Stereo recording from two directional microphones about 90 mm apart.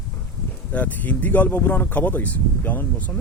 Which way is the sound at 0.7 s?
20° left (ahead or behind).